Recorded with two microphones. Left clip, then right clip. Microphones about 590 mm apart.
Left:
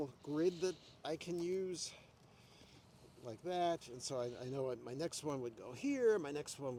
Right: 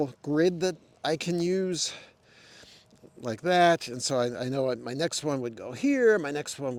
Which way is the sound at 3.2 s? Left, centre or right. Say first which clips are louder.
Right 17 dB; right.